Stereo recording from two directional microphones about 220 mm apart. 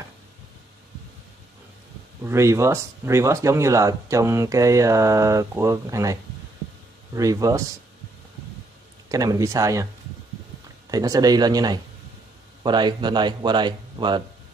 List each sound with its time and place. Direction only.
2.2 s speech: 10° right (ahead or behind)
7.2 s speech: 15° right (ahead or behind)
9.1 s speech: 15° right (ahead or behind)
10.9 s speech: 15° right (ahead or behind)